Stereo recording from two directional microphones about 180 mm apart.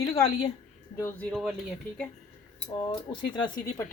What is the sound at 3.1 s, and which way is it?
Speech, 25° left (ahead or behind).